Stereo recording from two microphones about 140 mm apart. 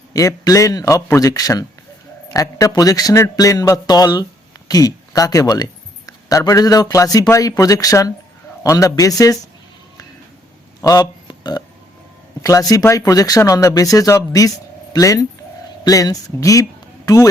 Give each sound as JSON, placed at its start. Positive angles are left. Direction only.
{"t": 0.1, "sound": "speech", "side_deg": 25}
{"t": 10.8, "sound": "burping", "side_deg": 25}
{"t": 12.4, "sound": "speech", "side_deg": 25}